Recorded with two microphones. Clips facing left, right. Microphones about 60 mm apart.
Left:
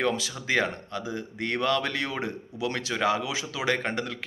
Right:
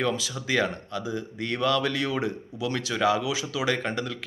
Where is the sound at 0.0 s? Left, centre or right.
Left.